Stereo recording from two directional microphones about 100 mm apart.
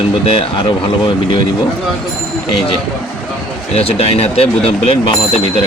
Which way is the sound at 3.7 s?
90° left.